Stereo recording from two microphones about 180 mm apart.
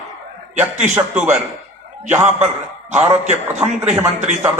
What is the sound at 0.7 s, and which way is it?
Speech, 40° right (ahead or behind).